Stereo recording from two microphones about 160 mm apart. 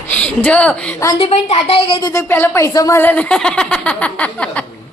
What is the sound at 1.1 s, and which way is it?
Speech, 40° left (ahead or behind).